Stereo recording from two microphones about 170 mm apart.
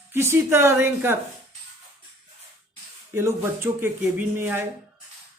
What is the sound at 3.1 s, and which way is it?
Speech, 15° right (ahead or behind).